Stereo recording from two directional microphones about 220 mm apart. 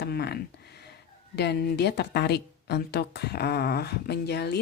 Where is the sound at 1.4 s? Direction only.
50° left (ahead or behind).